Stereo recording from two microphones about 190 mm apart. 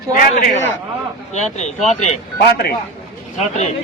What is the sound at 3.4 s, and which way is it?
Speech, 35° left (ahead or behind).